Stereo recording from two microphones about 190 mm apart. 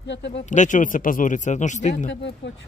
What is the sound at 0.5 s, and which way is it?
A man's voice, 40° left (ahead or behind).